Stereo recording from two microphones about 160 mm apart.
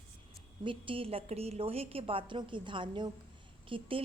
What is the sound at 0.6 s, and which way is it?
A woman's voice, 30° right (ahead or behind).